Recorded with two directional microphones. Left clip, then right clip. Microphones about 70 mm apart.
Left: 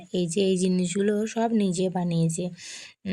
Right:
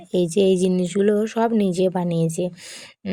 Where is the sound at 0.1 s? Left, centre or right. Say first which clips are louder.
Right 7 dB; right.